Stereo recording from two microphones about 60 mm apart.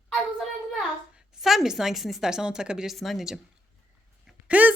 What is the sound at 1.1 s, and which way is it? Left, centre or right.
A woman's voice, centre.